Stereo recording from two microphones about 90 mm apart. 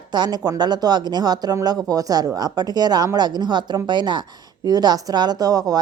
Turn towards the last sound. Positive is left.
turn(degrees=-45)  # may be behind; listen again after turning